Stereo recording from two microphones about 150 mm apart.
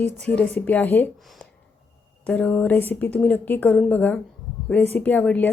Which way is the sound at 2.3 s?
10° left (ahead or behind).